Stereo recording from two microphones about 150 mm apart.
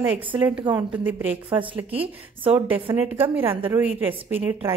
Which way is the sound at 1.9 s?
40° right (ahead or behind).